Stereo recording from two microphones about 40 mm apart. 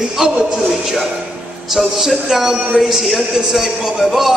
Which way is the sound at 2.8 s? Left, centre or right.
Centre.